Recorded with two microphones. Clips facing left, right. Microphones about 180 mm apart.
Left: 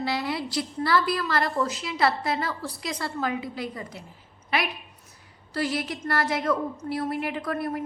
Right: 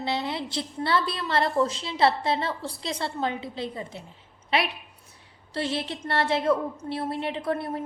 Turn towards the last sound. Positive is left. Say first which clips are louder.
# even
turn(degrees=-25)  # may be behind; listen again after turning